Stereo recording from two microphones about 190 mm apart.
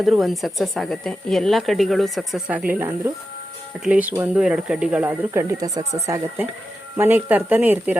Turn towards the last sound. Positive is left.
turn(degrees=-10)  # may be behind; listen again after turning